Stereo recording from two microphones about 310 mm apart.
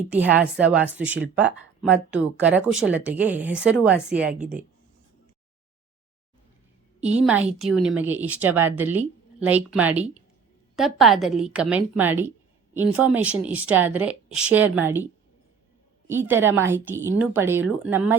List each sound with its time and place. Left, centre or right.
0.1 s a woman's voice: centre
7.0 s a woman's voice: centre
16.0 s speech: centre